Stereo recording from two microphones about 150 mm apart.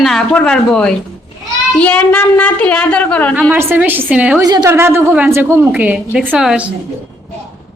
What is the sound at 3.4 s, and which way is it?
A woman's voice, 10° right (ahead or behind).